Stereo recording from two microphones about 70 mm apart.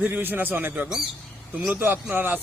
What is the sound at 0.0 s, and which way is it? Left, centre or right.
Speech, right.